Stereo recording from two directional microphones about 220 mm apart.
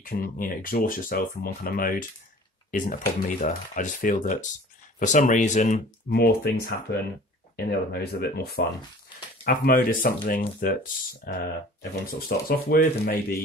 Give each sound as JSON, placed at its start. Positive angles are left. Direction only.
{"t": 0.0, "sound": "speech", "side_deg": 40}
{"t": 6.1, "sound": "speech", "side_deg": 45}